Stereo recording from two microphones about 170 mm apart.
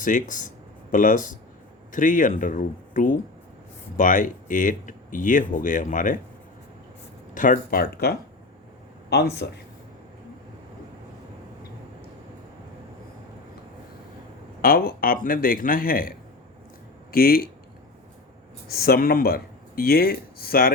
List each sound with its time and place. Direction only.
0.0 s speech: 50° left (ahead or behind)
7.3 s a man's voice: 50° left (ahead or behind)
9.0 s speech: 75° left (ahead or behind)
14.6 s a man's voice: 60° left (ahead or behind)
18.7 s speech: 65° left (ahead or behind)